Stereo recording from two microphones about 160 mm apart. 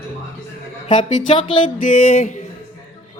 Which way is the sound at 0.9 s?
30° left (ahead or behind).